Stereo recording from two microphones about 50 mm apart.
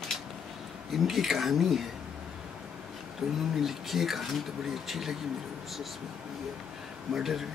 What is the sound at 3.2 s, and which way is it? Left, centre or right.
Speech, centre.